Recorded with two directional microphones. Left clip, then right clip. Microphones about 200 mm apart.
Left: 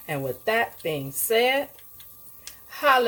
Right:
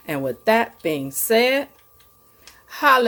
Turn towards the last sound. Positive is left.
turn(degrees=-45)  # may be behind; listen again after turning